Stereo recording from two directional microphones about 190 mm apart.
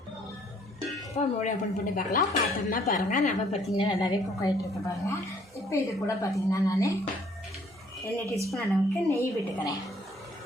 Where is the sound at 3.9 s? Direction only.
20° left (ahead or behind).